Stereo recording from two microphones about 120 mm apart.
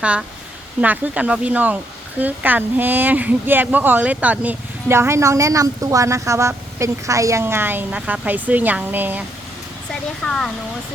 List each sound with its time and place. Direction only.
0.0 s speech: 10° right (ahead or behind)
10.2 s speech: 5° left (ahead or behind)